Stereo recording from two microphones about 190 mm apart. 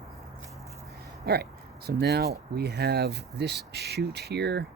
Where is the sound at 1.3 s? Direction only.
60° right (ahead or behind).